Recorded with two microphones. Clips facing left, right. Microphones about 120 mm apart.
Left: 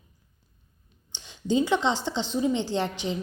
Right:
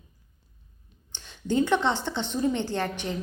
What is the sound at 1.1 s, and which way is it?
A woman's voice, 15° left (ahead or behind).